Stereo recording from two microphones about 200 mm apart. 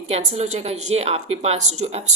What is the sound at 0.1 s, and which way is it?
A woman's voice, 35° right (ahead or behind).